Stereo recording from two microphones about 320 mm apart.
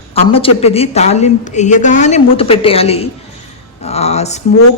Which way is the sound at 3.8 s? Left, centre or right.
Centre.